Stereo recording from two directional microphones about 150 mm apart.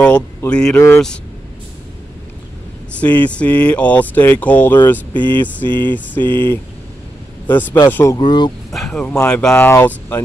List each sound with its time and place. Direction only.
0.5 s speech: 5° left (ahead or behind)
0.7 s speech: 15° left (ahead or behind)
3.0 s speech: 10° left (ahead or behind)
8.2 s speech: 30° left (ahead or behind)
8.7 s speech: 5° left (ahead or behind)